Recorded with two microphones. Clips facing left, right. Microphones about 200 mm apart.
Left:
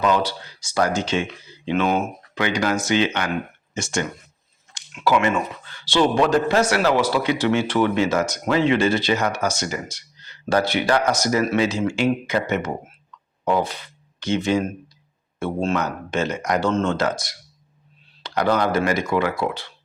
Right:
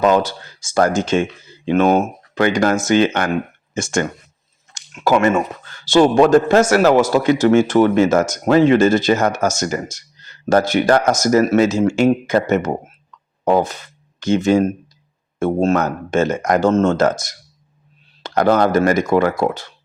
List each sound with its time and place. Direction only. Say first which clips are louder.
0.0 s a man's voice: right 5 dB; 45° right (ahead or behind)